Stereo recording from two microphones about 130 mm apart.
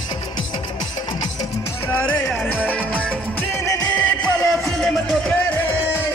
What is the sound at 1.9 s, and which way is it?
Music, 10° left (ahead or behind).